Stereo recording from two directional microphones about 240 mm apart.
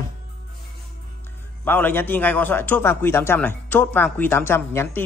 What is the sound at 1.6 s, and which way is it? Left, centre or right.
A man's voice, centre.